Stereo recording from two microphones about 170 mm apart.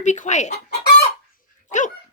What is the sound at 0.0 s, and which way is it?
Speech, 45° left (ahead or behind).